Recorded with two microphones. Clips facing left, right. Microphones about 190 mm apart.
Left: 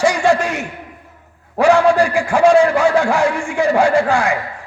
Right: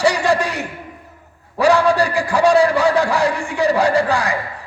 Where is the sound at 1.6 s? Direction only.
35° right (ahead or behind).